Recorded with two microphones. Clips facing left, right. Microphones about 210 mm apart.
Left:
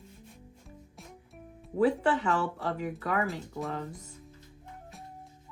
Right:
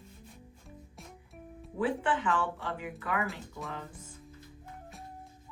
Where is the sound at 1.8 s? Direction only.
40° left (ahead or behind).